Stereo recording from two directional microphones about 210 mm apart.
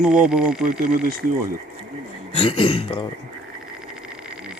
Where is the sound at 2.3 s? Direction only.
25° left (ahead or behind).